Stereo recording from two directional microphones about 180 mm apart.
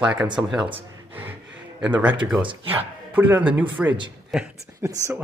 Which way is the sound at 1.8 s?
10° right (ahead or behind).